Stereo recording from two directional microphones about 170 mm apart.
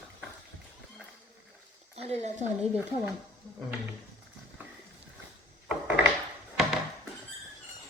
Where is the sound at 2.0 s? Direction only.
40° right (ahead or behind).